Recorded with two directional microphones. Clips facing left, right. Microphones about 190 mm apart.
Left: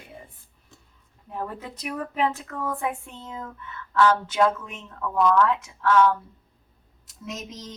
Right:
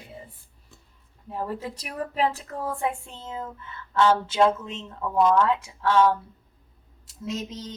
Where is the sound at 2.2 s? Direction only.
30° right (ahead or behind).